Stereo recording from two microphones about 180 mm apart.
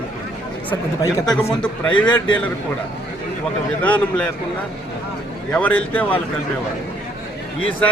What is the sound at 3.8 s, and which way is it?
Speech, 10° left (ahead or behind).